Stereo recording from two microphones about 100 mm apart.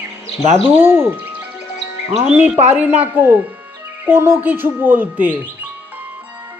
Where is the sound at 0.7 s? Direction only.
20° right (ahead or behind).